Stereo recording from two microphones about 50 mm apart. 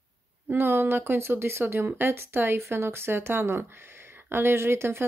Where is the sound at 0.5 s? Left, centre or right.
Right.